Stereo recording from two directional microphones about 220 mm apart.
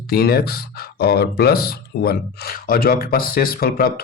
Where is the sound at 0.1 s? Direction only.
45° left (ahead or behind).